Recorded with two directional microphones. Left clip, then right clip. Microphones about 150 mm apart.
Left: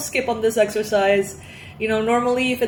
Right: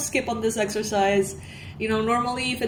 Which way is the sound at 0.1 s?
55° right (ahead or behind).